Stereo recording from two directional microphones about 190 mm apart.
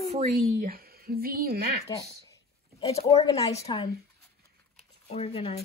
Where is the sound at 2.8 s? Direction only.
30° left (ahead or behind).